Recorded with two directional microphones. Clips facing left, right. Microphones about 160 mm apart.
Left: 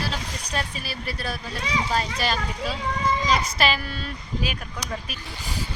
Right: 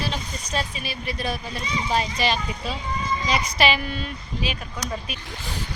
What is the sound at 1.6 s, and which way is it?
Speech, 90° left.